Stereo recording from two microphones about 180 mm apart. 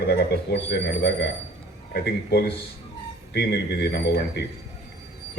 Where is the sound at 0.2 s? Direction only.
70° left (ahead or behind).